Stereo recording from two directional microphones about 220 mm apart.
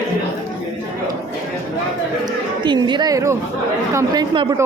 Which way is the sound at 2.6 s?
20° right (ahead or behind).